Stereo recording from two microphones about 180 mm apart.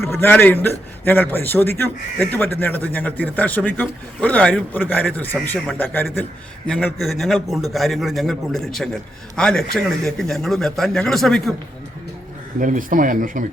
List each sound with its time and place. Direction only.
0.0 s a man's voice: 15° left (ahead or behind)
12.5 s speech: 45° right (ahead or behind)